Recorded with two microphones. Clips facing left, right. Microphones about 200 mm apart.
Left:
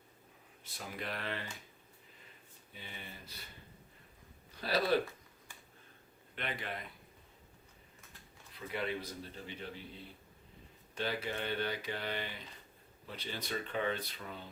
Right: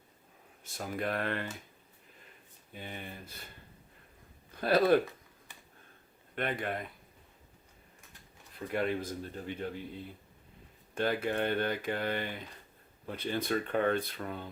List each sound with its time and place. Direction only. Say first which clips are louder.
0.6 s speech: right 8 dB; 45° right (ahead or behind)
2.7 s speech: right 7 dB; 50° right (ahead or behind)
4.5 s speech: right 7 dB; 50° right (ahead or behind)
6.3 s speech: right 7 dB; 50° right (ahead or behind)
8.5 s speech: right 6 dB; 50° right (ahead or behind)
10.9 s speech: right 7 dB; 50° right (ahead or behind)